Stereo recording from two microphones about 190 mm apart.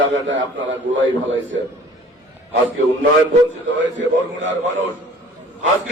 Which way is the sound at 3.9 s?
75° right (ahead or behind).